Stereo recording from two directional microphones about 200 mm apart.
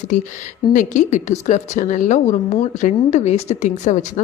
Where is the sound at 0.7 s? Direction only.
40° left (ahead or behind).